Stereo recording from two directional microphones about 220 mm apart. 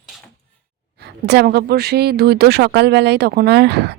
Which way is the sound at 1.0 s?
50° right (ahead or behind).